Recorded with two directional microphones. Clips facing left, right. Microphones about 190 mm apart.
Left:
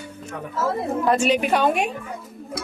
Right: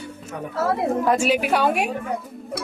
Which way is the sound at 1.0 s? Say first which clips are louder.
Left 3 dB; 10° right (ahead or behind).